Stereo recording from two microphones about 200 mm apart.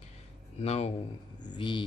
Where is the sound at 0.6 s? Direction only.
30° left (ahead or behind).